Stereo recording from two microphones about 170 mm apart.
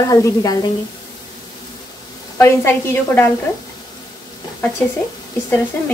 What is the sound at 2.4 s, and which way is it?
Speech, 15° left (ahead or behind).